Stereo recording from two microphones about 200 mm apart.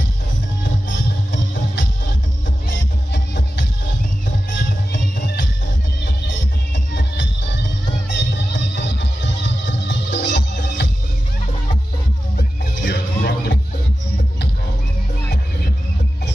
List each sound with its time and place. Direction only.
1.3 s music: 60° left (ahead or behind)
3.1 s music: 60° left (ahead or behind)
5.1 s music: 55° left (ahead or behind)
6.9 s music: 60° left (ahead or behind)
12.4 s music: 50° left (ahead or behind)